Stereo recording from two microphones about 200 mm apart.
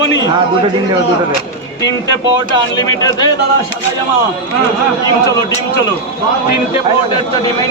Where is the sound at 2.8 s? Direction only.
20° left (ahead or behind).